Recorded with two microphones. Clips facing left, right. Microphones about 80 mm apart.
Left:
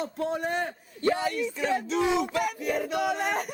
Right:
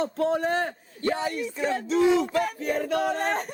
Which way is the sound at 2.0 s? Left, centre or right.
Centre.